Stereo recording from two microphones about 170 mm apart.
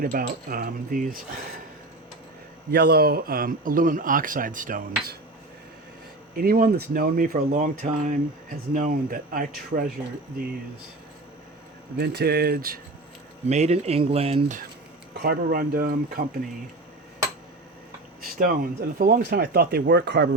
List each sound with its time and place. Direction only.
0.0 s a man's voice: 55° right (ahead or behind)
2.6 s a man's voice: 65° right (ahead or behind); by 5.1 s 50° right (ahead or behind)
6.3 s a man's voice: 60° right (ahead or behind)
11.9 s speech: 70° right (ahead or behind)
13.5 s speech: 40° right (ahead or behind)
15.1 s a man's voice: 65° right (ahead or behind)
18.3 s a man's voice: 55° right (ahead or behind); by 20.3 s 80° right